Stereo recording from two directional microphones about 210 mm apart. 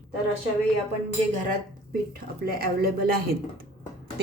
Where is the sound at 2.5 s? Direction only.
45° right (ahead or behind).